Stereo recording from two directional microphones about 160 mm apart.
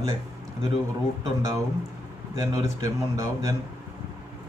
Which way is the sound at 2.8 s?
20° right (ahead or behind).